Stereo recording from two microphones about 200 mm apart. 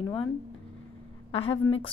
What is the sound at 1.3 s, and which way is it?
Speech, 30° left (ahead or behind).